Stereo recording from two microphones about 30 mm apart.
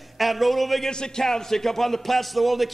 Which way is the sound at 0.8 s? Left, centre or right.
Left.